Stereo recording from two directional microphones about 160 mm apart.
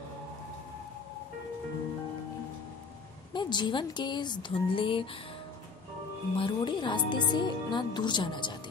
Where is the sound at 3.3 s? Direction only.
30° left (ahead or behind).